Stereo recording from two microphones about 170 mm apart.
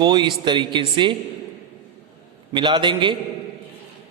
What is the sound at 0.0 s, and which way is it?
A man's voice, 25° right (ahead or behind).